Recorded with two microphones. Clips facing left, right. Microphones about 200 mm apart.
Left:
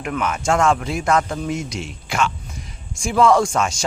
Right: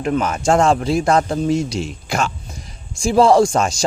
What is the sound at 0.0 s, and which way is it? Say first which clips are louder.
Speech: right 5 dB; 35° right (ahead or behind).